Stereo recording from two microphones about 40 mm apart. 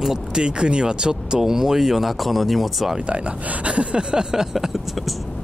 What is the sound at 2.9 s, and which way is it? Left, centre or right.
Speech, right.